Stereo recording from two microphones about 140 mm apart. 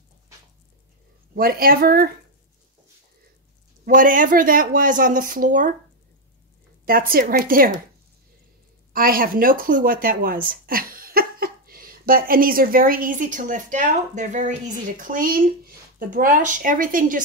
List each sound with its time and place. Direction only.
1.3 s speech: 90° right
3.8 s speech: 75° right (ahead or behind)
6.9 s speech: 90° right
8.9 s speech: 90° right; by 14.5 s 60° right (ahead or behind)
15.0 s speech: 80° right